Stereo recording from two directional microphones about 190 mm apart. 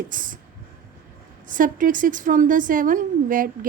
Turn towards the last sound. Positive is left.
turn(degrees=-45)  # may be behind; listen again after turning